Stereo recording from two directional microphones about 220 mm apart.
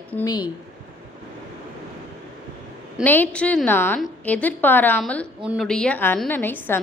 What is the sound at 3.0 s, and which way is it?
A woman's voice, 5° left (ahead or behind).